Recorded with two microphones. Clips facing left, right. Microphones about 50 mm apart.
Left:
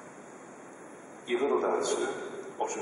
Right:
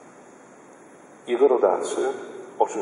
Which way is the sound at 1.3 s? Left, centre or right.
Centre.